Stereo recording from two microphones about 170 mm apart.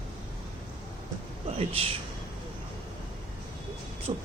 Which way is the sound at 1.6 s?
35° right (ahead or behind).